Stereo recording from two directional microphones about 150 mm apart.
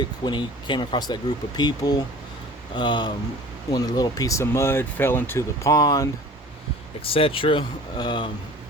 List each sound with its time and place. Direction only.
0.0 s speech: 30° left (ahead or behind)
7.0 s speech: 40° left (ahead or behind)